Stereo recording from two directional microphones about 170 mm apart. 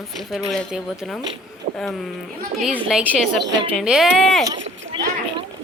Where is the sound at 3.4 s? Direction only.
90° right.